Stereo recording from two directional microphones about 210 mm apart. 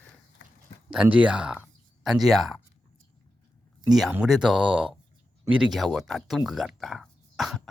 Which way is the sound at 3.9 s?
Centre (ahead or behind).